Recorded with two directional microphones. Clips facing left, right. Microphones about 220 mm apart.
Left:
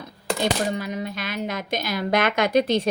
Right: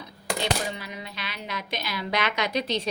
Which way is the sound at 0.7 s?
45° left (ahead or behind).